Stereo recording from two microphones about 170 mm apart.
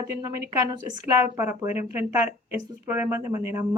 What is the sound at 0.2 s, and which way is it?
Speech, 20° right (ahead or behind).